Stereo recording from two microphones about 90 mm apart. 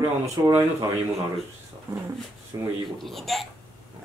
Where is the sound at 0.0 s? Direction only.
30° right (ahead or behind).